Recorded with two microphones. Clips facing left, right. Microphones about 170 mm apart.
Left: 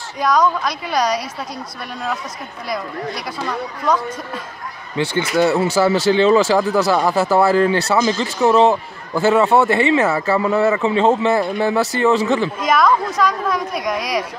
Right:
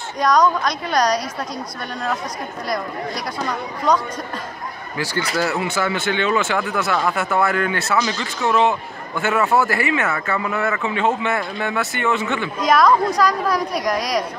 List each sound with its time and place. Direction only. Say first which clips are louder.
0.2 s a woman's voice: even; 5° left (ahead or behind)
3.4 s a woman's voice: even; 5° left (ahead or behind)
4.9 s speech: left 5 dB; 25° left (ahead or behind)
5.6 s speech: left 7 dB; 35° left (ahead or behind)
12.5 s a woman's voice: right 5 dB; centre (ahead or behind)